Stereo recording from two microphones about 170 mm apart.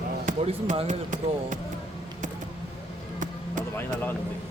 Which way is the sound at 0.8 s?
50° right (ahead or behind).